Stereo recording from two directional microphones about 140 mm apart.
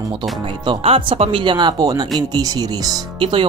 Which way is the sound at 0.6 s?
40° right (ahead or behind).